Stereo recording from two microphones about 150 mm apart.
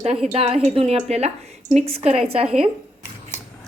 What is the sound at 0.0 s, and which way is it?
A woman's voice, 45° right (ahead or behind).